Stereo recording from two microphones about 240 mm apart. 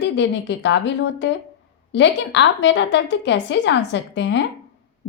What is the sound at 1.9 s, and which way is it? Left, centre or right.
A woman's voice, left.